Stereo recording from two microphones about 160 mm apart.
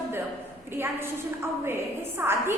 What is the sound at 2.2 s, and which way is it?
Speech, 15° right (ahead or behind).